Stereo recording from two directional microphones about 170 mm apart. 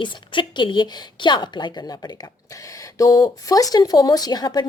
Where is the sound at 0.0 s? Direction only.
30° left (ahead or behind).